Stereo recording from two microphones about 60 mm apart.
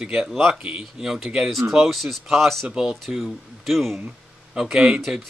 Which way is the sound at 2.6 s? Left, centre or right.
Centre.